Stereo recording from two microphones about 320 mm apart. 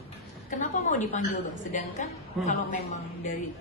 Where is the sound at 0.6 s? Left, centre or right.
Left.